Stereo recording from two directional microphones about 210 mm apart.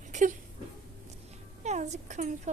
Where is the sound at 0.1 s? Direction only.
35° right (ahead or behind).